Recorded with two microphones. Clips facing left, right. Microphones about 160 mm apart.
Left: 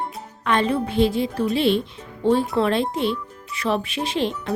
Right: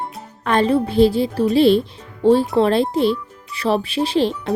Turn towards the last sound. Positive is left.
turn(degrees=-35)  # may be behind; listen again after turning